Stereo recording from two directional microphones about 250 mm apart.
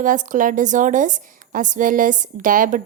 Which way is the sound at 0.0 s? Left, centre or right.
Right.